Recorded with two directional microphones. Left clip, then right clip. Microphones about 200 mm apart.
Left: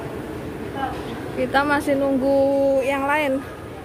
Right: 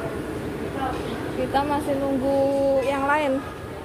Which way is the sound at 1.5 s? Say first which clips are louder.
Left 4 dB; 35° left (ahead or behind).